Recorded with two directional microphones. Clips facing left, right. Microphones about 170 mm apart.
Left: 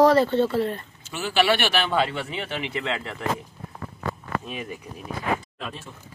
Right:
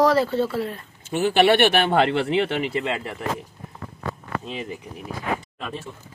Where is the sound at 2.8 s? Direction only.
15° right (ahead or behind).